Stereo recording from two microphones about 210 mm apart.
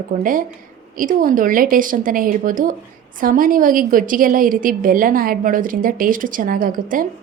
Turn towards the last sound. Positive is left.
turn(degrees=-40)  # may be behind; listen again after turning